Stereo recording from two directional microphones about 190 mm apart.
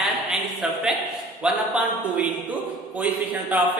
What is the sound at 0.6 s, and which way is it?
A man's voice, 5° right (ahead or behind).